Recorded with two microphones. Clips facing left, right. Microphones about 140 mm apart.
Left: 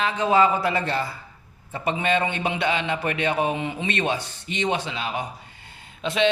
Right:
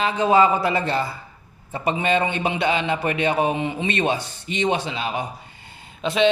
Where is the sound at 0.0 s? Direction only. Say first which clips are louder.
Right 3 dB; 30° right (ahead or behind).